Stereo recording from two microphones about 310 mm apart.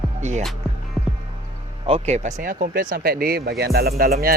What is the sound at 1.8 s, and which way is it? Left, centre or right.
Speech, centre.